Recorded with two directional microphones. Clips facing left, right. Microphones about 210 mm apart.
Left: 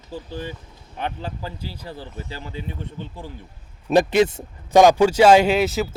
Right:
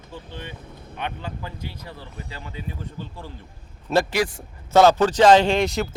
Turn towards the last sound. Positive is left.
turn(degrees=5)  # may be behind; listen again after turning